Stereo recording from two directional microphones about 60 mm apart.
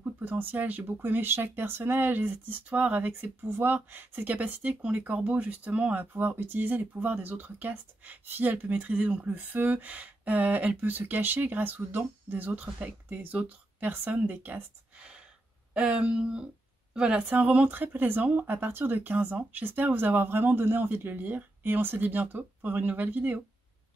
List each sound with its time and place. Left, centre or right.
0.2 s speech: right
15.0 s a sound: centre
15.7 s speech: centre
17.4 s speech: right